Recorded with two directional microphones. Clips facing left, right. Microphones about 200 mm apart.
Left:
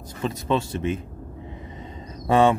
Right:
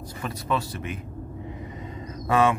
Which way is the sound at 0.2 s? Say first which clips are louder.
Left 4 dB; 25° left (ahead or behind).